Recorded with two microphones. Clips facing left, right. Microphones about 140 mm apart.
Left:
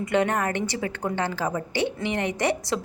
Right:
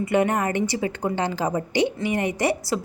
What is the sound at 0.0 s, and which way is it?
A woman's voice, 10° right (ahead or behind).